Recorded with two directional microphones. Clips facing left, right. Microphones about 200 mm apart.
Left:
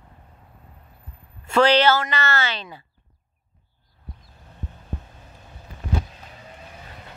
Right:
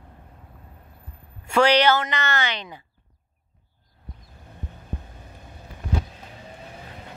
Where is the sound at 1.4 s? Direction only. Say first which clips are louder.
Left 1 dB; 15° right (ahead or behind).